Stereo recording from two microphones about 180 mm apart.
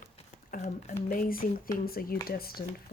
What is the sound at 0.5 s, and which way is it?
Speech, 45° left (ahead or behind).